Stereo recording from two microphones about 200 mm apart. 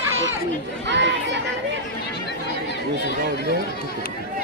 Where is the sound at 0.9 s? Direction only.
60° right (ahead or behind).